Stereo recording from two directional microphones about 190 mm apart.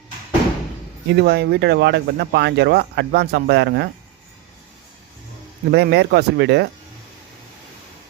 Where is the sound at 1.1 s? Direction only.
60° right (ahead or behind).